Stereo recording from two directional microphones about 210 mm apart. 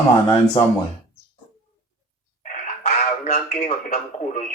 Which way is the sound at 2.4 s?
35° left (ahead or behind).